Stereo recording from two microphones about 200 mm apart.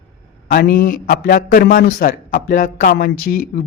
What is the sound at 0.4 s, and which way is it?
A man's voice, 50° left (ahead or behind).